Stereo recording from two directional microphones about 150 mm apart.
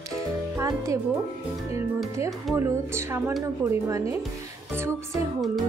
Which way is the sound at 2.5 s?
15° right (ahead or behind).